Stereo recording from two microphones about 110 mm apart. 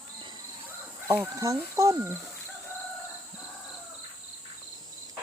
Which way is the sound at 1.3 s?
30° right (ahead or behind).